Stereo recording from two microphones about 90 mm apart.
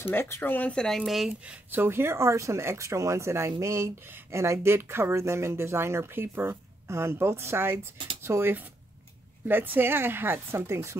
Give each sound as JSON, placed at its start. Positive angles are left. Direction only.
{"t": 0.0, "sound": "speech", "side_deg": 25}
{"t": 0.7, "sound": "speech", "side_deg": 5}
{"t": 1.4, "sound": "speech", "side_deg": -15}
{"t": 1.8, "sound": "speech", "side_deg": -25}